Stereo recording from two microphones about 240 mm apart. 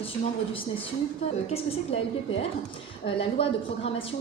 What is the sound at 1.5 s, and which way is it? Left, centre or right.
Speech, left.